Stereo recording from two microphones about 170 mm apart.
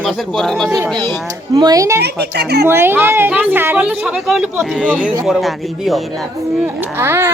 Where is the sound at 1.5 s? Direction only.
25° right (ahead or behind).